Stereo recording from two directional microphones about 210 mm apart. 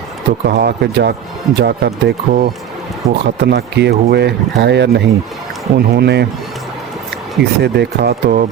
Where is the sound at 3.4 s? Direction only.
55° right (ahead or behind).